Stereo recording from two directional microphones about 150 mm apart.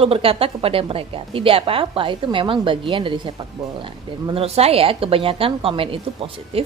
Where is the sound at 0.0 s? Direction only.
40° right (ahead or behind).